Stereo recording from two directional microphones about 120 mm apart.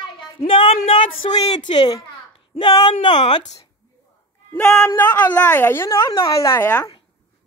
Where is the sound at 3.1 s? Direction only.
40° left (ahead or behind).